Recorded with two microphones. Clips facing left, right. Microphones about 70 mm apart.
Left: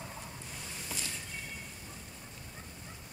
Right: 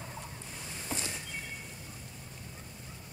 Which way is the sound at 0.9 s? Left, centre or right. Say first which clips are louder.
Right 5 dB; right.